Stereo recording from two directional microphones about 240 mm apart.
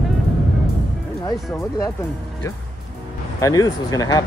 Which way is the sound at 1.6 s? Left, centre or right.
Centre.